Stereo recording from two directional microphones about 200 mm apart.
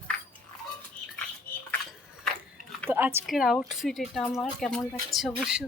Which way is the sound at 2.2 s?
Centre (ahead or behind).